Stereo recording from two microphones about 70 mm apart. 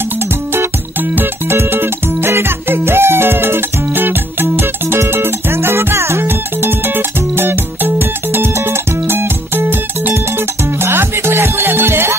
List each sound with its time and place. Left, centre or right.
1.1 s music: right